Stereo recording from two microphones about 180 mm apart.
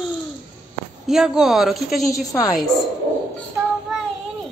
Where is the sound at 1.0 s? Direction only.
Centre (ahead or behind).